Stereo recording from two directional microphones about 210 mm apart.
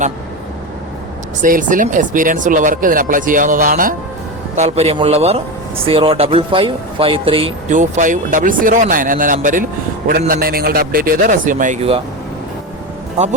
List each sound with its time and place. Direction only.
1.4 s speech: 40° right (ahead or behind)
7.8 s a man's voice: 40° right (ahead or behind)